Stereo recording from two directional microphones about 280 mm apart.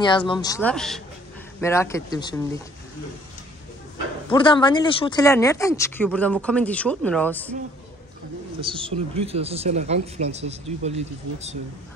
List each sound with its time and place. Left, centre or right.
0.0 s speech: centre
4.3 s speech: centre
8.5 s speech: centre